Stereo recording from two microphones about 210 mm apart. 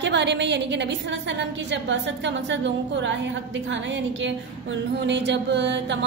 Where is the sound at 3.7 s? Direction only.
60° right (ahead or behind).